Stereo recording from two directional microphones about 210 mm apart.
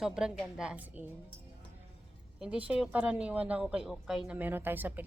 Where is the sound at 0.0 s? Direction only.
5° right (ahead or behind).